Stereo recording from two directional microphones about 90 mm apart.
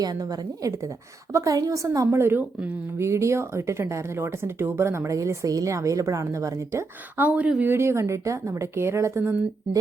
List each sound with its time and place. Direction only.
0.0 s a woman's voice: 45° right (ahead or behind)
2.0 s speech: 25° right (ahead or behind)
7.2 s a woman's voice: 15° right (ahead or behind)
7.7 s speech: 30° right (ahead or behind)